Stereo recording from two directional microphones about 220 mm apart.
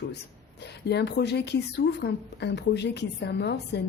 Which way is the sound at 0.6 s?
50° left (ahead or behind).